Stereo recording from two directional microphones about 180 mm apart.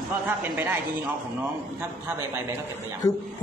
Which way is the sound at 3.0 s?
20° left (ahead or behind).